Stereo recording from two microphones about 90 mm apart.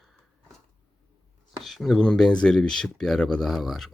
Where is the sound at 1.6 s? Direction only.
Centre (ahead or behind).